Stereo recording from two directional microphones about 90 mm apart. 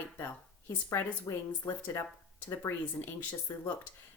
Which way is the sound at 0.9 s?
30° left (ahead or behind).